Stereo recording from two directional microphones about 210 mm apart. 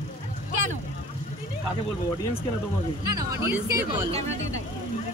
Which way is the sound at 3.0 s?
15° right (ahead or behind).